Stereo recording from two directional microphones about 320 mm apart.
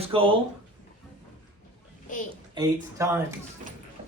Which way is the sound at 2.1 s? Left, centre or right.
Left.